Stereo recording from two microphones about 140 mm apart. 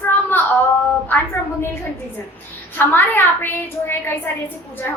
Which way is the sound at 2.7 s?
15° left (ahead or behind).